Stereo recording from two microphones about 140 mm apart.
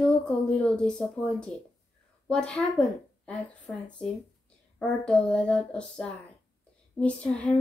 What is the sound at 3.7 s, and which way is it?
Speech, 25° left (ahead or behind).